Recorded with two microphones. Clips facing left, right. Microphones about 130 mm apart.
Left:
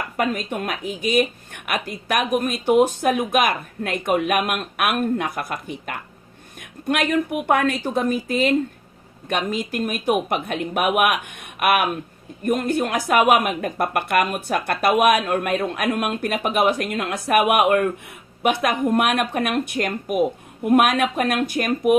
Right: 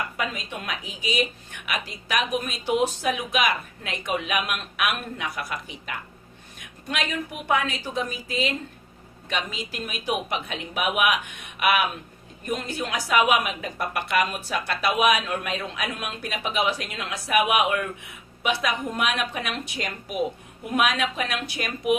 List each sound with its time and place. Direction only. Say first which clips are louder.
0.2 s speech: left 8 dB; 50° left (ahead or behind)